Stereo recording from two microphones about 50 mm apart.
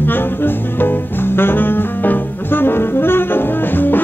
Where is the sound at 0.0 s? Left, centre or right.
Left.